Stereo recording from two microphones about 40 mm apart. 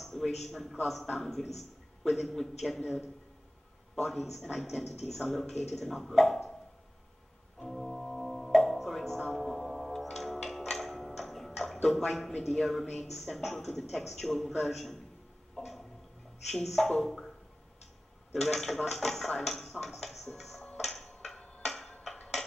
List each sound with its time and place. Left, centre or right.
0.0 s a man's voice: centre
3.9 s a man's voice: centre
7.6 s music: centre
12.4 s a man's voice: centre
15.5 s a sound: centre
16.4 s a man's voice: centre
18.3 s speech: centre
21.1 s music: centre
21.4 s tick-tock: left
21.6 s music: centre